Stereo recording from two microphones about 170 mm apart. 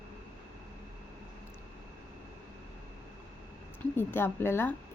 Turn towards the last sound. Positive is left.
turn(degrees=15)  # may be behind; listen again after turning